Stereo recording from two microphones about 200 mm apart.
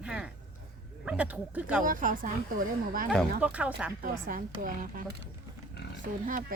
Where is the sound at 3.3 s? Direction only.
5° right (ahead or behind).